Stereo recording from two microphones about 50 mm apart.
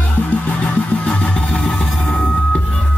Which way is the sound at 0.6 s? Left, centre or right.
Left.